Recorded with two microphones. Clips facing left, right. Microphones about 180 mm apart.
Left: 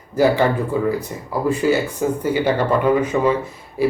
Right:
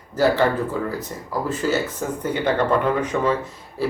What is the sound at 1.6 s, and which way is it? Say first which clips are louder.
A man's voice: left 4 dB; 15° left (ahead or behind).